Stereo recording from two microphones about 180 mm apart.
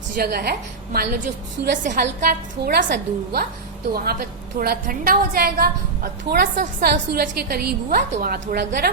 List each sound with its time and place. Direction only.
0.2 s a woman's voice: 60° right (ahead or behind)
2.6 s a woman's voice: 60° right (ahead or behind)